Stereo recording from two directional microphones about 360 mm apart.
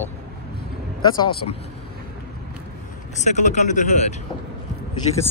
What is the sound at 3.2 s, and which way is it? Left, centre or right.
Speech, centre.